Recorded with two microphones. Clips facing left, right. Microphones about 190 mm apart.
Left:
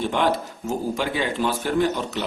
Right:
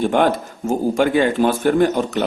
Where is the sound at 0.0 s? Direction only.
50° right (ahead or behind).